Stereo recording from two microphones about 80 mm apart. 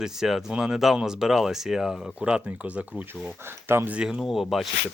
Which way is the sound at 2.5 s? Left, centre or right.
Centre.